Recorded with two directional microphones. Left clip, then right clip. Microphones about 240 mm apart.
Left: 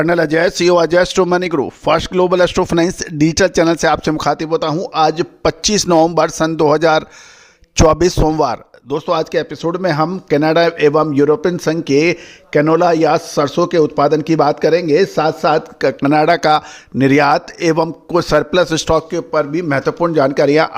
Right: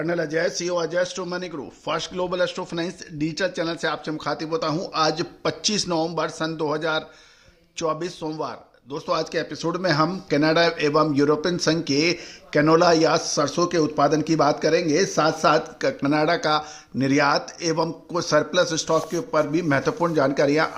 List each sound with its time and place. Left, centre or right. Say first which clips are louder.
0.0 s a man's voice: left 11 dB; left